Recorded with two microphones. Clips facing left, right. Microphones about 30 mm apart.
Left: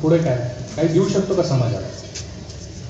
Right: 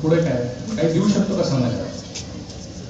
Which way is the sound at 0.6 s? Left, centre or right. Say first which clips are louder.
Left 2 dB; right.